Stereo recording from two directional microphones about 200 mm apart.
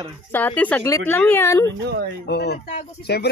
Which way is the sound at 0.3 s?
10° left (ahead or behind).